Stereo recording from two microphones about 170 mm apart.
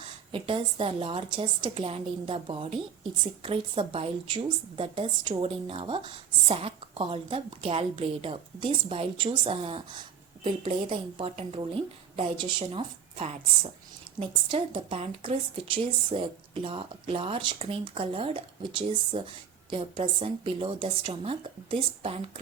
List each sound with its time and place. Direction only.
0.0 s a woman's voice: 30° right (ahead or behind)